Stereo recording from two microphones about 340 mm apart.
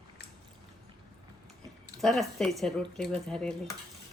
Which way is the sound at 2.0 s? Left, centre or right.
Centre.